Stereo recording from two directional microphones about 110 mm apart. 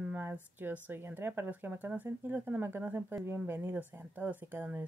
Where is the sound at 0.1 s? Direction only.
20° right (ahead or behind).